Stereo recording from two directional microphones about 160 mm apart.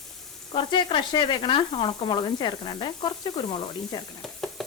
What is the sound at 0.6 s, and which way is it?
A woman's voice, 30° left (ahead or behind).